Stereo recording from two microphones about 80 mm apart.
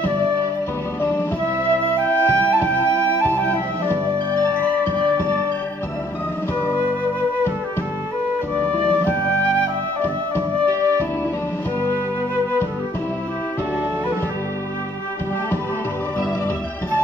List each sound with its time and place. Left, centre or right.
2.0 s music: centre
9.6 s music: left